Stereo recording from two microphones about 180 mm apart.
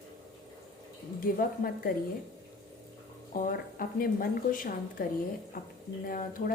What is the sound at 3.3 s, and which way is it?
A woman's voice, 50° left (ahead or behind).